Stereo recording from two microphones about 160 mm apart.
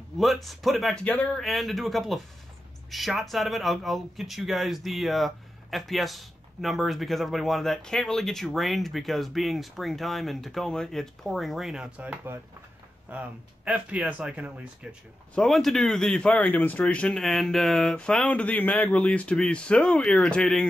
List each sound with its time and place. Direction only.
0.2 s speech: centre (ahead or behind)